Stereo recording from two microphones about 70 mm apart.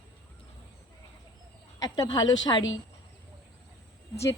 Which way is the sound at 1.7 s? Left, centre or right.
Left.